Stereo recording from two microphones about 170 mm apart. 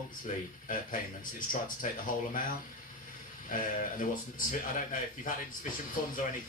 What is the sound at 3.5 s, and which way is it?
Speech, 50° left (ahead or behind).